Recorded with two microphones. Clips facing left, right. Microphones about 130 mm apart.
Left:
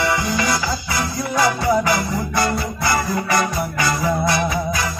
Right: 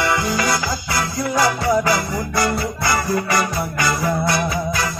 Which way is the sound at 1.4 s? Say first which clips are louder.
Left 1 dB; 20° left (ahead or behind).